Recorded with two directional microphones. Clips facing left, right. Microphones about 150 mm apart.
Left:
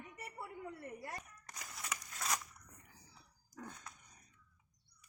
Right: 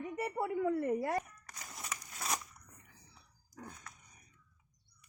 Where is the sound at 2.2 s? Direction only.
20° right (ahead or behind).